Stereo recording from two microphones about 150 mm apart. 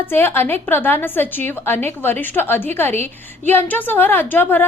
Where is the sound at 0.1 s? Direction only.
15° left (ahead or behind).